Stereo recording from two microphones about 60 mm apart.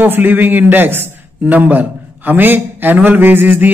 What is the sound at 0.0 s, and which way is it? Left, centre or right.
A man's voice, right.